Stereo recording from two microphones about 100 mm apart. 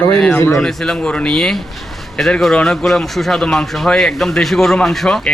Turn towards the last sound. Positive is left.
turn(degrees=5)  # may be behind; listen again after turning